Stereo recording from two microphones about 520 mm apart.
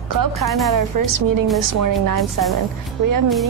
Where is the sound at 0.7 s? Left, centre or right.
Right.